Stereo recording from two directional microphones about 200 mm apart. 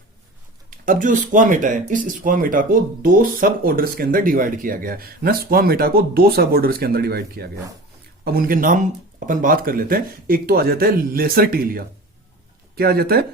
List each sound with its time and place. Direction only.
0.7 s speech: 40° right (ahead or behind)